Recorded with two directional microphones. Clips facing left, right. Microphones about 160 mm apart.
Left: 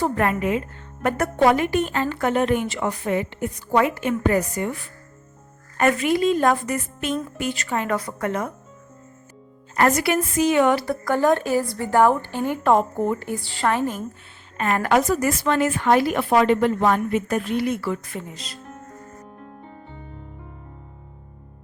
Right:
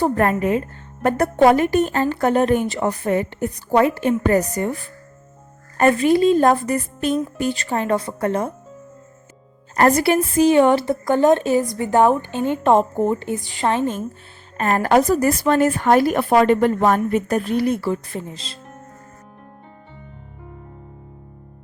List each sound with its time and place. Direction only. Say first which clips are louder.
0.0 s a woman's voice: right 4 dB; 40° right (ahead or behind)
5.7 s a woman's voice: right 4 dB; 30° right (ahead or behind)
9.7 s a woman's voice: right 4 dB; 35° right (ahead or behind)
14.6 s a woman's voice: right 3 dB; 40° right (ahead or behind)